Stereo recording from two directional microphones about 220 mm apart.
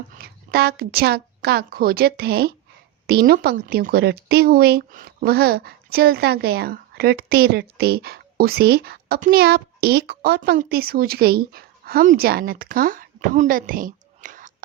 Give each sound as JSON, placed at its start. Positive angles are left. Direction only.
{"t": 0.2, "sound": "a woman's voice", "side_deg": -45}